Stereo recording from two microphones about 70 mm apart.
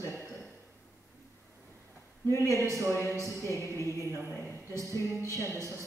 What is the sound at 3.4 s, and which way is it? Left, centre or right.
Music, left.